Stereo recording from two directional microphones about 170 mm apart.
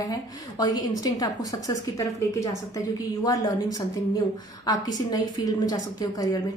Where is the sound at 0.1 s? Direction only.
20° left (ahead or behind).